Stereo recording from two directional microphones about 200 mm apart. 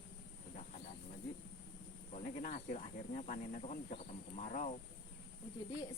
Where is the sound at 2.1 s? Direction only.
35° left (ahead or behind).